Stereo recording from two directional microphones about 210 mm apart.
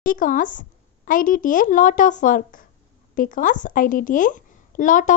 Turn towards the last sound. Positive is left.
turn(degrees=40)  # may be behind; listen again after turning